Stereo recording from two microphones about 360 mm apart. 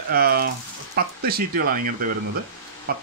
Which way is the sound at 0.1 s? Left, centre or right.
Right.